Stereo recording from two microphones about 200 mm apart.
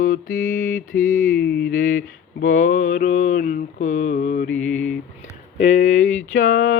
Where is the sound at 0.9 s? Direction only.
45° left (ahead or behind).